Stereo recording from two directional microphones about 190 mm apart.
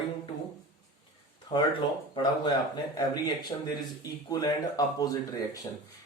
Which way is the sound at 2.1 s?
20° left (ahead or behind).